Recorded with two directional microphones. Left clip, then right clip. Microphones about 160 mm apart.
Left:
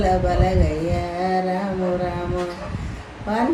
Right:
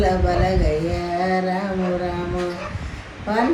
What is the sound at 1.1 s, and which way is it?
Music, 25° left (ahead or behind).